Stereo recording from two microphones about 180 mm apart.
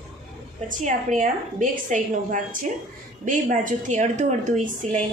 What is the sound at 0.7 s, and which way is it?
A woman's voice, 45° right (ahead or behind).